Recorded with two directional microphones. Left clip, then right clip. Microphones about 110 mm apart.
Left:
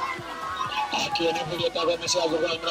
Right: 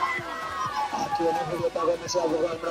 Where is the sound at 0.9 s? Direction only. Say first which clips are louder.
Even; 15° left (ahead or behind).